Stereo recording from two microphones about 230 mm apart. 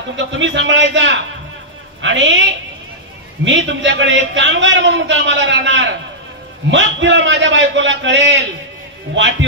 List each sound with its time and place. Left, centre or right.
0.1 s a man's voice: right
3.4 s a man's voice: right